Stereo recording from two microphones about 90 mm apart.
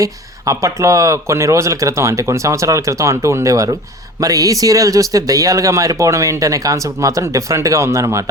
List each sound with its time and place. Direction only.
0.0 s speech: 35° right (ahead or behind)